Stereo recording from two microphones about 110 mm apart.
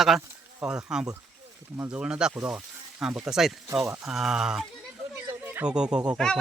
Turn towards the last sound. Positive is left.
turn(degrees=-10)  # may be behind; listen again after turning